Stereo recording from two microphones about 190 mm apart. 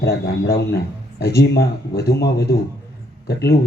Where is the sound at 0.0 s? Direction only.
55° left (ahead or behind).